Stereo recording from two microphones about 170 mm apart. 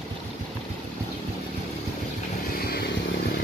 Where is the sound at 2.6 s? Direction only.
65° left (ahead or behind).